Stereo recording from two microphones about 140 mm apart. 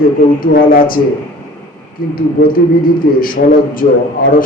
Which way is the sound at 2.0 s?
90° left.